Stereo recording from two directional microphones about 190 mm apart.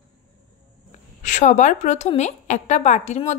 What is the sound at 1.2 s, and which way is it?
A woman's voice, 40° left (ahead or behind).